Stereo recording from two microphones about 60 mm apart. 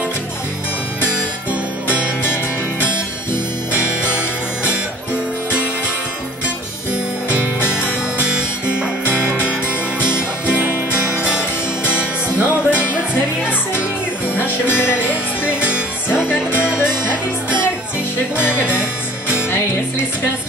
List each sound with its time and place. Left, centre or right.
9.9 s music: left
11.2 s music: centre
12.0 s music: left
14.3 s music: left
18.3 s music: left